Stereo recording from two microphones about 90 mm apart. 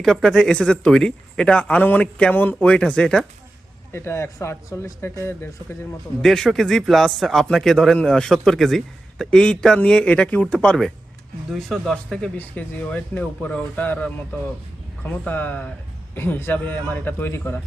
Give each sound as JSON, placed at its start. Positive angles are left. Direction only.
{"t": 0.0, "sound": "speech", "side_deg": 5}
{"t": 3.9, "sound": "speech", "side_deg": 30}
{"t": 6.2, "sound": "speech", "side_deg": 5}
{"t": 12.4, "sound": "speech", "side_deg": 15}
{"t": 15.3, "sound": "speech", "side_deg": 20}